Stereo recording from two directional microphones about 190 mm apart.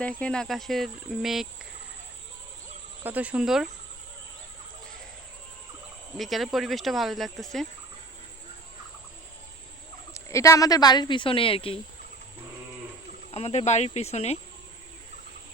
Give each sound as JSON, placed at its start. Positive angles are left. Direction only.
{"t": 0.0, "sound": "speech", "side_deg": 5}
{"t": 3.0, "sound": "speech", "side_deg": -10}
{"t": 6.1, "sound": "speech", "side_deg": 0}
{"t": 10.2, "sound": "speech", "side_deg": 15}
{"t": 13.3, "sound": "speech", "side_deg": 30}